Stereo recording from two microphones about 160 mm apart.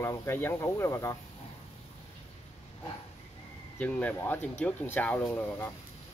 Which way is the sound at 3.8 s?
10° left (ahead or behind).